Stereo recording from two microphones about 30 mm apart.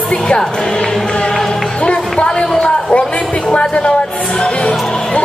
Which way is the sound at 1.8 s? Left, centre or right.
Left.